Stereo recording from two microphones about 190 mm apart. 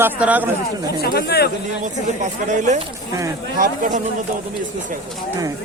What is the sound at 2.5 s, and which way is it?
Speech, 40° right (ahead or behind).